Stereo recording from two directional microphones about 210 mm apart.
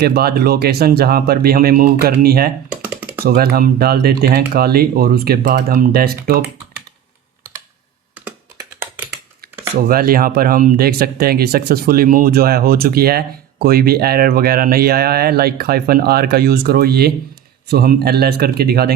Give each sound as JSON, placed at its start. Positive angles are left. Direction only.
{"t": 0.0, "sound": "speech", "side_deg": -50}
{"t": 2.6, "sound": "computer keyboard", "side_deg": -5}
{"t": 3.2, "sound": "speech", "side_deg": -45}
{"t": 8.1, "sound": "computer keyboard", "side_deg": -10}
{"t": 9.8, "sound": "speech", "side_deg": -45}